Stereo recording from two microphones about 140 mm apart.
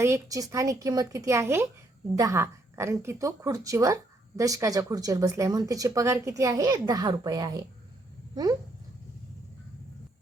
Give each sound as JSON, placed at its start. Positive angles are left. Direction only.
{"t": 0.0, "sound": "a woman's voice", "side_deg": -20}